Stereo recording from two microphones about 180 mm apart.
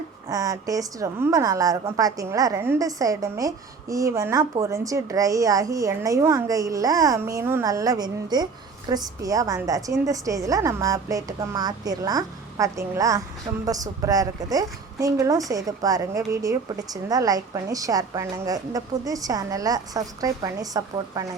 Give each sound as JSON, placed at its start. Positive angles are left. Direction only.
{"t": 0.3, "sound": "a woman's voice", "side_deg": -20}